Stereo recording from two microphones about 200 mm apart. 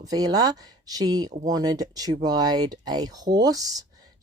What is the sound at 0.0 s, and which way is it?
Speech, 20° right (ahead or behind).